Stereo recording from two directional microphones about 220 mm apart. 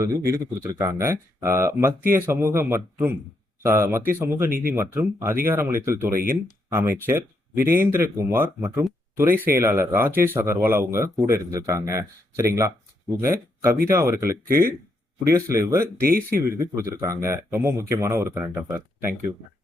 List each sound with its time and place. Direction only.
0.0 s speech: 15° right (ahead or behind)
16.0 s speech: 40° right (ahead or behind)
16.6 s speech: 15° right (ahead or behind)